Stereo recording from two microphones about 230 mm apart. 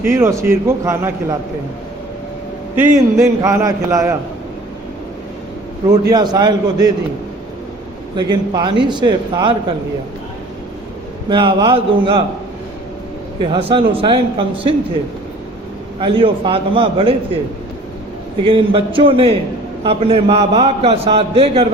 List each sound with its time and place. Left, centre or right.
0.0 s a man's voice: centre
2.7 s a man's voice: centre
5.9 s a man's voice: centre
8.1 s a man's voice: centre
11.3 s a man's voice: right
13.5 s a man's voice: right
16.0 s a man's voice: right
18.4 s a man's voice: right